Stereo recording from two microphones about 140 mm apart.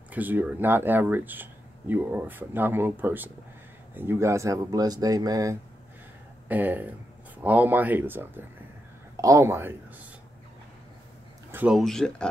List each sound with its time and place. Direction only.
0.1 s speech: 15° right (ahead or behind)
6.5 s speech: 10° right (ahead or behind)
11.5 s a sound: 10° right (ahead or behind)
11.8 s speech: 5° left (ahead or behind)